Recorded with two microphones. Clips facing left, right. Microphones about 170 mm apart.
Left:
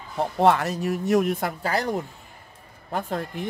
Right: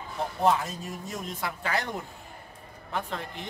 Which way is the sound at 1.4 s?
40° left (ahead or behind).